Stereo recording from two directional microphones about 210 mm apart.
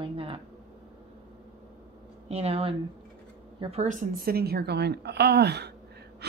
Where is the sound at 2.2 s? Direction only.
30° right (ahead or behind).